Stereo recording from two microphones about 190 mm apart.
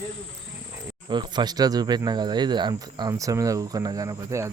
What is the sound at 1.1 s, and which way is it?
Speech, 20° right (ahead or behind).